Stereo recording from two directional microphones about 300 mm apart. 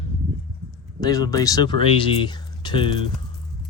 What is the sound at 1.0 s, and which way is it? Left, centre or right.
Speech, centre.